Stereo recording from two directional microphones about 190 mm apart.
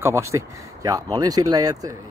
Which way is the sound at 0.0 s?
15° right (ahead or behind).